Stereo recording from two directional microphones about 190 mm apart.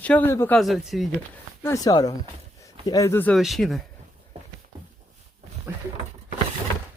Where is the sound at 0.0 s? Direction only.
10° left (ahead or behind).